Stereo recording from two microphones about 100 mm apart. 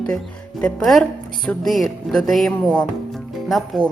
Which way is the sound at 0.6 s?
Centre (ahead or behind).